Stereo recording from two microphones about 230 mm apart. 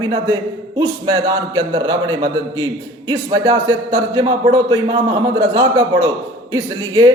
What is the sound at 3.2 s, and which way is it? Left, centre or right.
A man's voice, right.